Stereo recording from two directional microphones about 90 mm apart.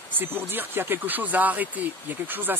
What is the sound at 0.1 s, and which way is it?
Speech, 25° right (ahead or behind).